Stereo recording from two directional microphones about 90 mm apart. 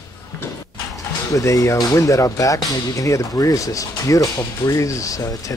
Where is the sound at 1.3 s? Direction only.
40° left (ahead or behind).